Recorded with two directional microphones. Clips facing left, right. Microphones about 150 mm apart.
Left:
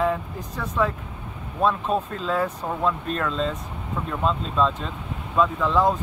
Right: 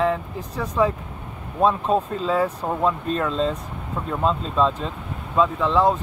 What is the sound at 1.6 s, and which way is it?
Speech, 35° right (ahead or behind).